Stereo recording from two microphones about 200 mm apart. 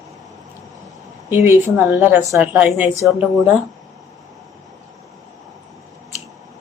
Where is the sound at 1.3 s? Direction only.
10° right (ahead or behind).